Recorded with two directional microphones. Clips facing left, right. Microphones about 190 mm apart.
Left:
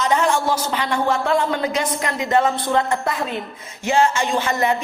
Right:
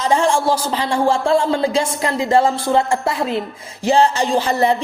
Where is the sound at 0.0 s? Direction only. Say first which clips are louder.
Right 3 dB; 30° right (ahead or behind).